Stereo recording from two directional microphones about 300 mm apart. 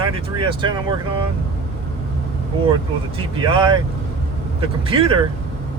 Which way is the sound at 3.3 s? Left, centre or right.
Centre.